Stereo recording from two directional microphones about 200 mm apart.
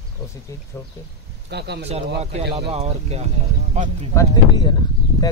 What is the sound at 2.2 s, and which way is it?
Speech, 30° right (ahead or behind).